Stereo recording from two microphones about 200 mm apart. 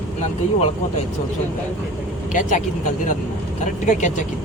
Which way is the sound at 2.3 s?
40° left (ahead or behind).